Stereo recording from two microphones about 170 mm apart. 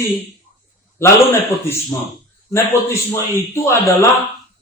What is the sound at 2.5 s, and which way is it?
A man's voice, 15° left (ahead or behind).